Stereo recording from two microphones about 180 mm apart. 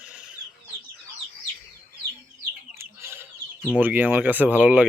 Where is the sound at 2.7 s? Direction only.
15° right (ahead or behind).